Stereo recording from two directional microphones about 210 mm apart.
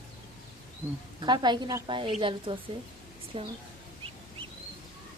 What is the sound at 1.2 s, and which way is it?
A woman's voice, 20° right (ahead or behind).